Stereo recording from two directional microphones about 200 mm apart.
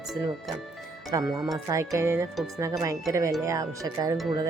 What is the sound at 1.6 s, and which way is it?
Speech, 15° right (ahead or behind).